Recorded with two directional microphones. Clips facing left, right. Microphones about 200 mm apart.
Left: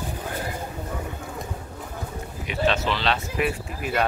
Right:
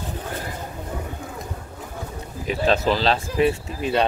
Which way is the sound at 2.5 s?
35° right (ahead or behind).